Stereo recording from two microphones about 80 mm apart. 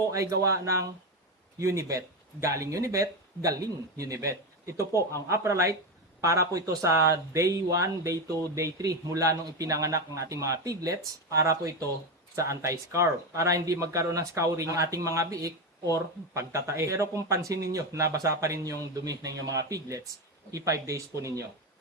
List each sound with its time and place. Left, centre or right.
0.1 s speech: right